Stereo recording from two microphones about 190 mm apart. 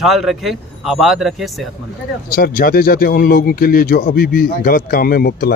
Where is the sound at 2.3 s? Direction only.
50° left (ahead or behind).